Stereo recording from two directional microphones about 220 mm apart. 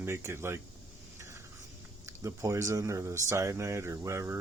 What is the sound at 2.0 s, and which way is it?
Speech, 15° right (ahead or behind).